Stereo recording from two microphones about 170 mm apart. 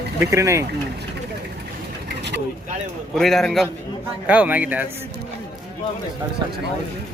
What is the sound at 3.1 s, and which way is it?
A man's voice, centre (ahead or behind).